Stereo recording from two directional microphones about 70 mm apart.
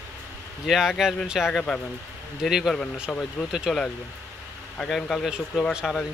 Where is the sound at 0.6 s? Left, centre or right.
Centre.